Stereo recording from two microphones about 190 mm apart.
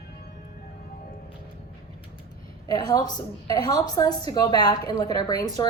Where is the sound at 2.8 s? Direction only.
20° left (ahead or behind).